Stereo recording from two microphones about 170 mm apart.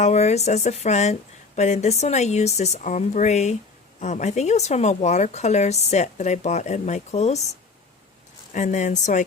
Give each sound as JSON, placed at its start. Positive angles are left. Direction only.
{"t": 0.0, "sound": "speech", "side_deg": 40}
{"t": 8.5, "sound": "speech", "side_deg": 45}